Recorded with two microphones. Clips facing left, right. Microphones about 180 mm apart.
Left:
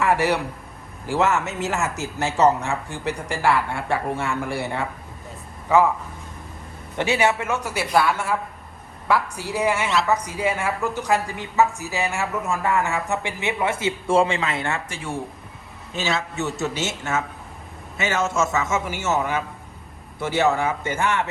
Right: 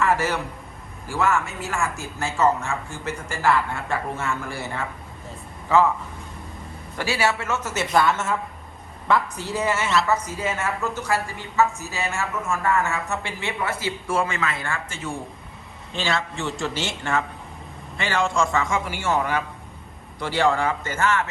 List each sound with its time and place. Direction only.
0.2 s a woman's voice: 15° left (ahead or behind)
5.6 s a man's voice: 15° left (ahead or behind)
6.9 s a woman's voice: 20° left (ahead or behind)
15.9 s a man's voice: centre (ahead or behind)